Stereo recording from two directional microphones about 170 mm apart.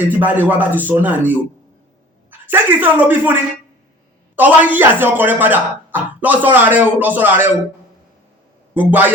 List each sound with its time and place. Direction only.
0.2 s speech: 10° right (ahead or behind)
2.5 s speech: 10° right (ahead or behind)
4.4 s speech: 10° right (ahead or behind)
8.7 s a man's voice: 10° right (ahead or behind)